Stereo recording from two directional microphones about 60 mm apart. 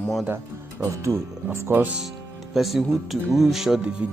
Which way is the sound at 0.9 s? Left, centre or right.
Right.